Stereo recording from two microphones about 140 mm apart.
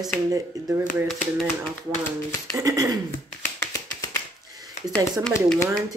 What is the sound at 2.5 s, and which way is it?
Speech, 25° right (ahead or behind).